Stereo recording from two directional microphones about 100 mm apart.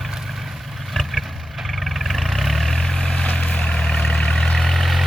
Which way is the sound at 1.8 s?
Centre (ahead or behind).